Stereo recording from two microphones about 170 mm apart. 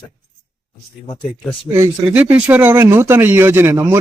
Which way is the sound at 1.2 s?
5° left (ahead or behind).